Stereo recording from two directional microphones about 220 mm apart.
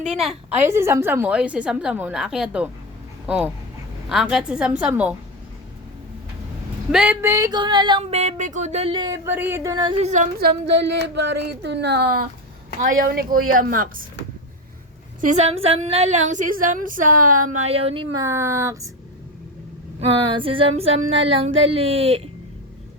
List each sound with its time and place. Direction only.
0.0 s a woman's voice: centre (ahead or behind)
6.9 s a sound: 5° right (ahead or behind); by 12.3 s 50° right (ahead or behind)
13.0 s a woman's voice: 40° right (ahead or behind)
15.2 s a woman's voice: 30° right (ahead or behind)
17.3 s speech: 90° right
17.6 s speech: 25° right (ahead or behind)
20.0 s a sound: 25° right (ahead or behind)